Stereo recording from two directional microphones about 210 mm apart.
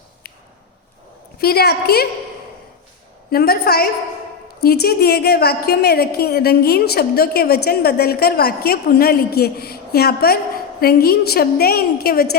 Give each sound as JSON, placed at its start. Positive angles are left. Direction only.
{"t": 1.4, "sound": "a woman's voice", "side_deg": 45}
{"t": 3.2, "sound": "a woman's voice", "side_deg": 45}